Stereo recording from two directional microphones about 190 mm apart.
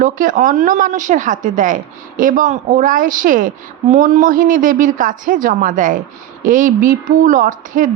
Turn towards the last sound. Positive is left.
turn(degrees=-45)  # may be behind; listen again after turning